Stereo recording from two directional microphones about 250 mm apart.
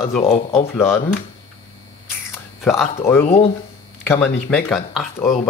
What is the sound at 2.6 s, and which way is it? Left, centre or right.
A man's voice, centre.